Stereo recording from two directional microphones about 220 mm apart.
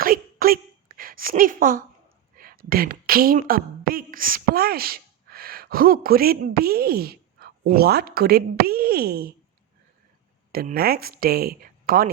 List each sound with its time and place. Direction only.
0.0 s a sound: 40° right (ahead or behind)
2.4 s a woman's voice: 40° right (ahead or behind)
10.5 s speech: 45° right (ahead or behind)